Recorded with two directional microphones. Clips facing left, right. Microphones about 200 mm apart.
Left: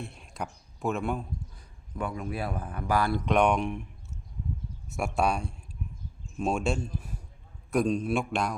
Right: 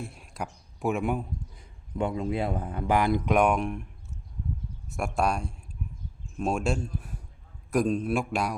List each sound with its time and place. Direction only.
0.1 s a sound: 5° right (ahead or behind)
0.8 s speech: 10° right (ahead or behind)
4.9 s a man's voice: 5° left (ahead or behind)